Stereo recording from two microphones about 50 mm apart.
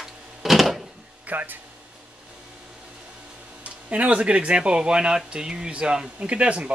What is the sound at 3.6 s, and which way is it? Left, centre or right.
Speech, right.